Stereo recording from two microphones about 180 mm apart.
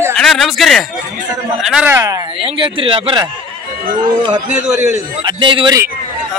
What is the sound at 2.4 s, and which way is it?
Speech, 30° right (ahead or behind).